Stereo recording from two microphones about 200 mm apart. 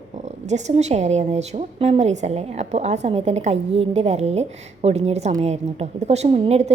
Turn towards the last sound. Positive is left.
turn(degrees=-30)  # may be behind; listen again after turning